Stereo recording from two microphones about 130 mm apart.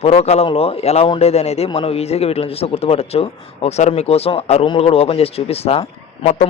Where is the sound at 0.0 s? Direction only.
55° left (ahead or behind).